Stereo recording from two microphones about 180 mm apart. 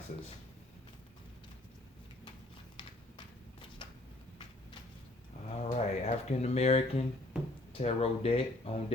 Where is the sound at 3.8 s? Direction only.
25° left (ahead or behind).